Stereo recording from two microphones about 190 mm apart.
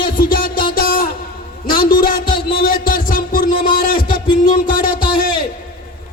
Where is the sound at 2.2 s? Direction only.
25° left (ahead or behind).